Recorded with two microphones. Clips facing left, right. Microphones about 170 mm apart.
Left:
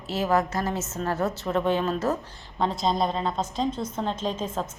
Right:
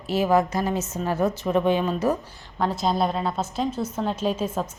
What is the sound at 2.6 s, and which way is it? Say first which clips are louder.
A woman's voice: right 1 dB; centre (ahead or behind).